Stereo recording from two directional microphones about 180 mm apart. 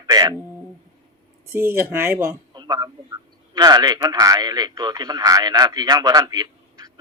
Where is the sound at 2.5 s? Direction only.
25° right (ahead or behind).